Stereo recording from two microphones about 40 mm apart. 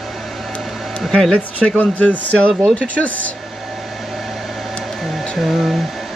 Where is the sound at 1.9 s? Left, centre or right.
Left.